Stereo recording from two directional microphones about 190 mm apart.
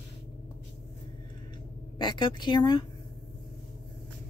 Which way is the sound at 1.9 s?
20° left (ahead or behind).